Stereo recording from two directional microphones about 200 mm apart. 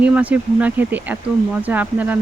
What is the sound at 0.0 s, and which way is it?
Speech, 5° right (ahead or behind).